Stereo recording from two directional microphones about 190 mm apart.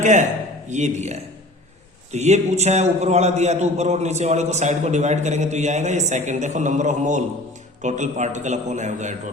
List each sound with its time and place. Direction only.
0.0 s a man's voice: 40° right (ahead or behind)